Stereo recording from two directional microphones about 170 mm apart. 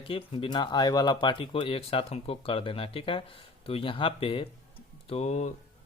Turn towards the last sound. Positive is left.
turn(degrees=40)  # may be behind; listen again after turning